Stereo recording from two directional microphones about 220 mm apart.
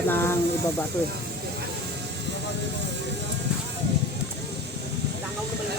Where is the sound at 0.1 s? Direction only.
10° left (ahead or behind).